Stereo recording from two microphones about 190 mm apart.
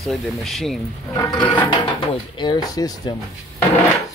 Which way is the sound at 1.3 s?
25° left (ahead or behind).